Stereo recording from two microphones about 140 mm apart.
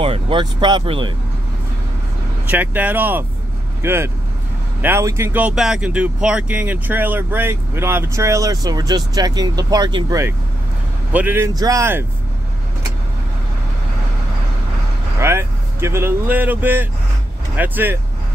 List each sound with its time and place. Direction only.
0.0 s speech: 40° right (ahead or behind)
2.4 s speech: 10° right (ahead or behind); by 10.2 s 30° right (ahead or behind)
11.1 s speech: 10° right (ahead or behind)
15.1 s speech: 20° right (ahead or behind)